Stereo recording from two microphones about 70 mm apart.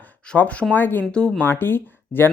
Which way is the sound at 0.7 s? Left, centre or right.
Left.